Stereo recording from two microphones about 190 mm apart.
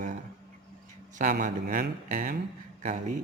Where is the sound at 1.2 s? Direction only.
45° right (ahead or behind).